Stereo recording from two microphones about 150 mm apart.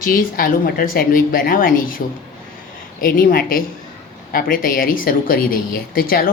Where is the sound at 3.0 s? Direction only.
70° left (ahead or behind).